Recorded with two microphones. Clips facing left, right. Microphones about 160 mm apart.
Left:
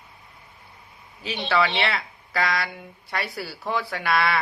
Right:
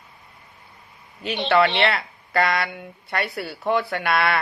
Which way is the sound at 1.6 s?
65° right (ahead or behind).